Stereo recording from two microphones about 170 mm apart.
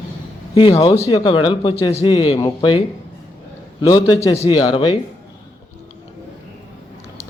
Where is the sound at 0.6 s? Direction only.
30° left (ahead or behind).